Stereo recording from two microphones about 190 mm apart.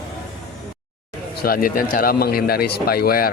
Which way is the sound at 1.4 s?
50° left (ahead or behind).